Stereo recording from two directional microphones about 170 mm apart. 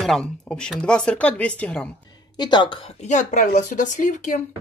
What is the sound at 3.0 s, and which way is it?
Speech, 45° left (ahead or behind).